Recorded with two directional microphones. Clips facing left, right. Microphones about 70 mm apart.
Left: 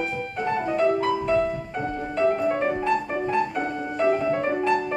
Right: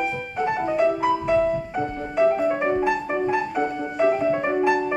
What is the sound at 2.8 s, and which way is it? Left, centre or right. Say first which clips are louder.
Music: right 2 dB; centre.